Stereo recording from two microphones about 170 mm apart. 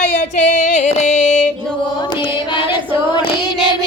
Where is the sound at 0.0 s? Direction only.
45° left (ahead or behind).